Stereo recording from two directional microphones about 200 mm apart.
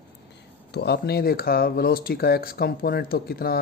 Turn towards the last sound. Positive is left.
turn(degrees=50)  # may be behind; listen again after turning